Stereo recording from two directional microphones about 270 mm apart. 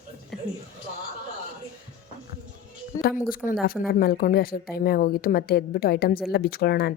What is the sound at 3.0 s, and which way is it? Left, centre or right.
A woman's voice, left.